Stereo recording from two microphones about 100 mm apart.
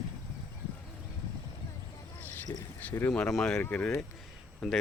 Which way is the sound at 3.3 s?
5° left (ahead or behind).